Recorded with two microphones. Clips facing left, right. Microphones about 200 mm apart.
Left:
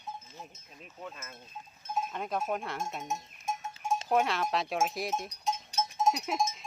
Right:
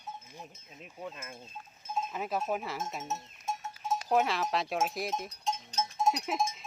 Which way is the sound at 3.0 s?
15° left (ahead or behind).